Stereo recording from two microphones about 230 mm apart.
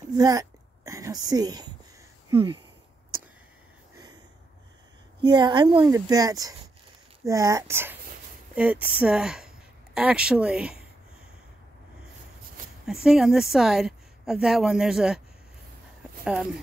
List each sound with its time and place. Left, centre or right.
0.1 s a sound: centre
1.3 s speech: centre
5.2 s a woman's voice: centre
12.8 s a woman's voice: centre